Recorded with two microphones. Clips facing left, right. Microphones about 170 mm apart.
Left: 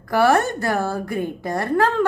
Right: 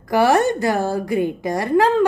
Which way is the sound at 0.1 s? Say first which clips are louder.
Right 2 dB; 15° right (ahead or behind).